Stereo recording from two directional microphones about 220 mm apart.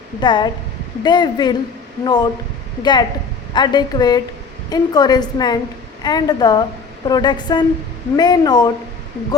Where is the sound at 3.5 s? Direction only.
20° left (ahead or behind).